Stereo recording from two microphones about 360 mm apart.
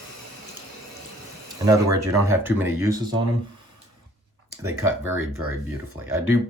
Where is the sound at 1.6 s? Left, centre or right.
Centre.